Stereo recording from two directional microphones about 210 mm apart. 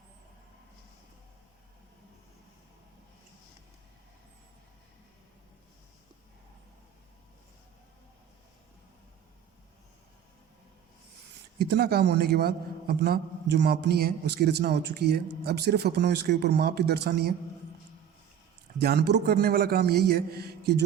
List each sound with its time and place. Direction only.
11.6 s a man's voice: 50° right (ahead or behind)
18.8 s a man's voice: 50° right (ahead or behind)